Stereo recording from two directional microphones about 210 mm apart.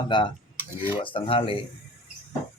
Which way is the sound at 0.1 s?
20° left (ahead or behind).